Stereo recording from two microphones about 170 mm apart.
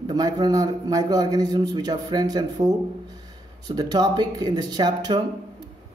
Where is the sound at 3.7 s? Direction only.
25° right (ahead or behind).